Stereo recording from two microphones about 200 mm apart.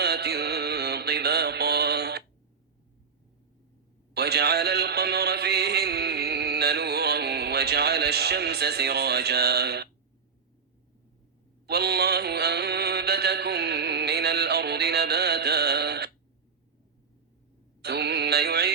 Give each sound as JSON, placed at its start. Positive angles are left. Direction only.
{"t": 0.0, "sound": "mantra", "side_deg": -55}
{"t": 4.1, "sound": "music", "side_deg": -55}
{"t": 11.6, "sound": "mantra", "side_deg": -55}
{"t": 17.8, "sound": "music", "side_deg": -55}